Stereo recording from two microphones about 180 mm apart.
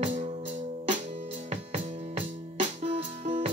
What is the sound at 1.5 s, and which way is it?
Music, 40° right (ahead or behind).